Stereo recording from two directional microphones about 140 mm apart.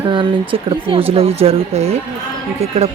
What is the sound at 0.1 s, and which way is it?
Speech, 40° right (ahead or behind).